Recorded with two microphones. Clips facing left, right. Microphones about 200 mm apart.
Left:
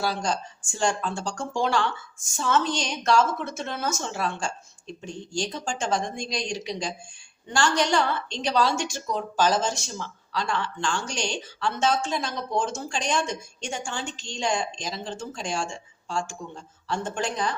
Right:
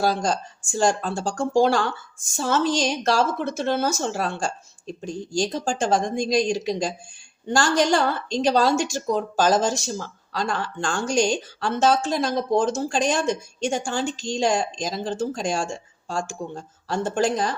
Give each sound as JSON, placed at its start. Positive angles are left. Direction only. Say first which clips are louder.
{"t": 0.0, "sound": "speech", "louder": "right 5 dB", "side_deg": -45}